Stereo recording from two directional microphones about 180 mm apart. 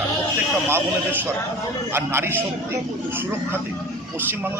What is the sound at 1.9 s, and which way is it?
Speech, 15° right (ahead or behind).